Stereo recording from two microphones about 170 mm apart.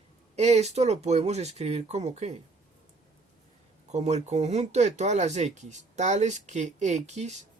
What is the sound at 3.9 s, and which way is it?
Speech, 40° right (ahead or behind).